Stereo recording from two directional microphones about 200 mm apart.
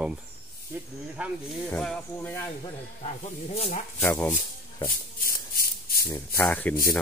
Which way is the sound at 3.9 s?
5° left (ahead or behind).